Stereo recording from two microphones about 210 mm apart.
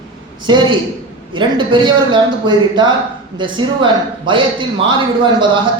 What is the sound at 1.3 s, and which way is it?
A woman's voice, 20° right (ahead or behind).